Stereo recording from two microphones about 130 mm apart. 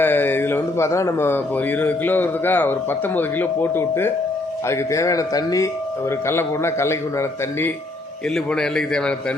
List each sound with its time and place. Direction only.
0.0 s a man's voice: 15° left (ahead or behind)
8.4 s a man's voice: 5° left (ahead or behind)